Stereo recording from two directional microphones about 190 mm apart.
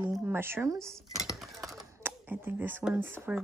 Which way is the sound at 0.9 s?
Centre (ahead or behind).